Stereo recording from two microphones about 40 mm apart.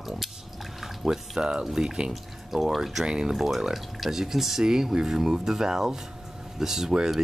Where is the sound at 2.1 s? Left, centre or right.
Centre.